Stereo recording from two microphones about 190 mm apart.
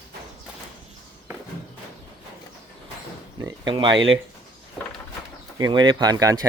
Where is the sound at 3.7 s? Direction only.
25° right (ahead or behind).